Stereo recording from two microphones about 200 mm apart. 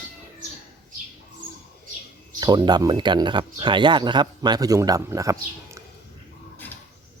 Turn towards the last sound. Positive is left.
turn(degrees=-15)  # may be behind; listen again after turning